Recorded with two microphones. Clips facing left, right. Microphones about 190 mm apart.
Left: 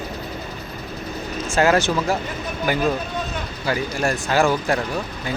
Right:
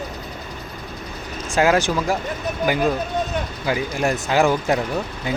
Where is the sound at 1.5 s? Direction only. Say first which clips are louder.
Even; 10° right (ahead or behind).